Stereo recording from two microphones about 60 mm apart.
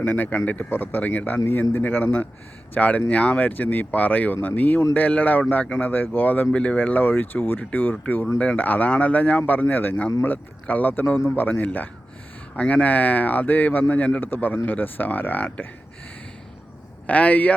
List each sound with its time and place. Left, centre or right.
0.0 s a man's voice: left
17.1 s speech: left